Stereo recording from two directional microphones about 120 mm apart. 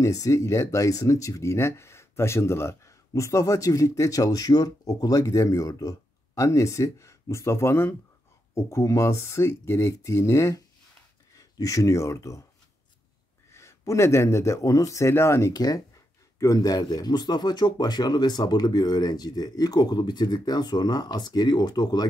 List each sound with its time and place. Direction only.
0.0 s speech: 25° left (ahead or behind)
13.5 s speech: 25° left (ahead or behind)